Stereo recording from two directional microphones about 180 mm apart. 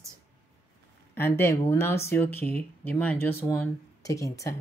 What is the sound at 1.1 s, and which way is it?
Speech, 15° left (ahead or behind).